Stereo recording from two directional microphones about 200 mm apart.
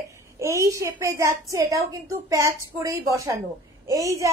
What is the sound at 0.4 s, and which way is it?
A woman's voice, 15° right (ahead or behind).